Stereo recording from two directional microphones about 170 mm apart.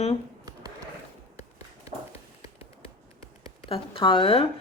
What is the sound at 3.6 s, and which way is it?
Speech, 30° left (ahead or behind).